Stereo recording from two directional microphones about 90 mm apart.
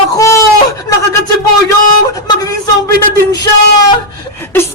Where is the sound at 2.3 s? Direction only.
45° left (ahead or behind).